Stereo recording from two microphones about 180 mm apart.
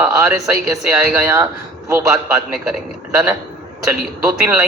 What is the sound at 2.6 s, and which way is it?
Speech, 5° right (ahead or behind).